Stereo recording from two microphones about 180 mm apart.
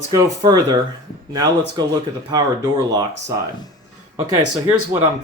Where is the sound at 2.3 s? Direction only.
20° right (ahead or behind).